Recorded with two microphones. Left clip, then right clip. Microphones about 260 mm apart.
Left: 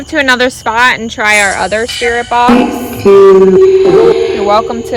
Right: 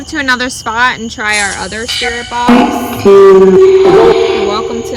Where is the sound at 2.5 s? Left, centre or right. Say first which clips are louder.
Right 2 dB; centre.